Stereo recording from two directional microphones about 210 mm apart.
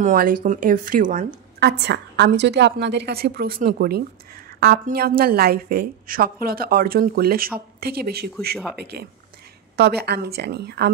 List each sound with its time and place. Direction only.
0.0 s a woman's voice: 45° right (ahead or behind)